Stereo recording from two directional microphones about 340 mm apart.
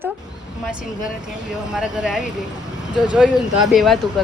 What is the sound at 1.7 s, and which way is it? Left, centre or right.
Speech, centre.